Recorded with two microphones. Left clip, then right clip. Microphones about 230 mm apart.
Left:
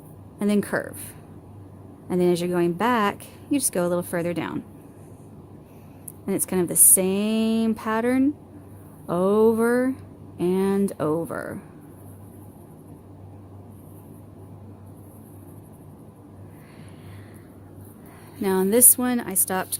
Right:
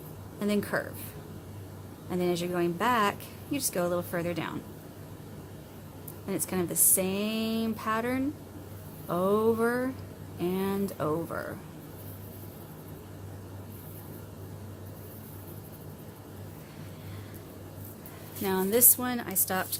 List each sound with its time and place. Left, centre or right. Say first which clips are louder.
0.3 s speech: left 5 dB; left
2.0 s speech: left 8 dB; left
6.2 s speech: left 7 dB; left
18.4 s speech: left 6 dB; left